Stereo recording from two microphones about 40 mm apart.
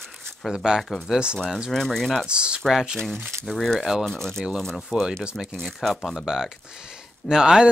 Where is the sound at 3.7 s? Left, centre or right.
Centre.